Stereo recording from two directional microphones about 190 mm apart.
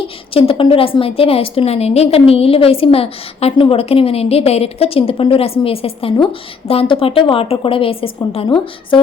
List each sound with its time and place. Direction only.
0.0 s a woman's voice: 30° left (ahead or behind)